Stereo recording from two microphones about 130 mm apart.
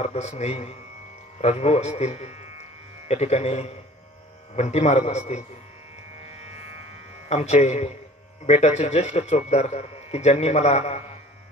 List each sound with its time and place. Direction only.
0.0 s speech: 60° left (ahead or behind)
7.2 s speech: 55° left (ahead or behind)